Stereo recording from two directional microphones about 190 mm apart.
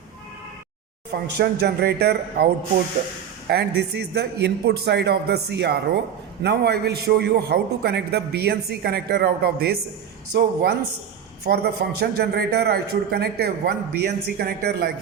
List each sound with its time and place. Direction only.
1.1 s a man's voice: 60° right (ahead or behind)
3.5 s a man's voice: 60° right (ahead or behind)